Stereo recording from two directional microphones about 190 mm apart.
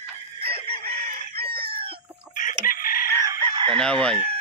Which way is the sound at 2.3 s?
45° left (ahead or behind).